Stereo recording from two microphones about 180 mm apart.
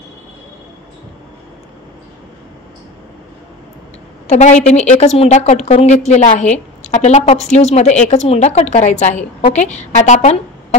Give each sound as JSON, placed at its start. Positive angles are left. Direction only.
{"t": 4.3, "sound": "a woman's voice", "side_deg": 40}